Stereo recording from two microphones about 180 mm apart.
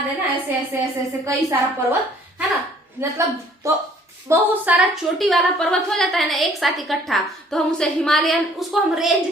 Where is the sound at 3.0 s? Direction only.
10° right (ahead or behind).